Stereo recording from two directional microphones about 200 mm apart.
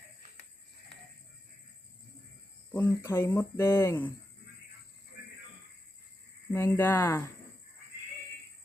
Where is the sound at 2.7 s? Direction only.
10° left (ahead or behind).